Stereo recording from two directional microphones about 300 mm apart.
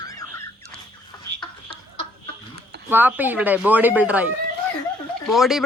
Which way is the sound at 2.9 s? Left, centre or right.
Centre.